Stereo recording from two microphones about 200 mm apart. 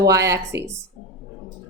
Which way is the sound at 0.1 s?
15° right (ahead or behind).